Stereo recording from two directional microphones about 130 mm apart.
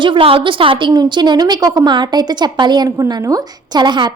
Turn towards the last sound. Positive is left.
turn(degrees=-35)  # may be behind; listen again after turning